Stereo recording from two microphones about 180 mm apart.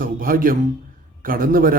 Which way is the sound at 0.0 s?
50° right (ahead or behind).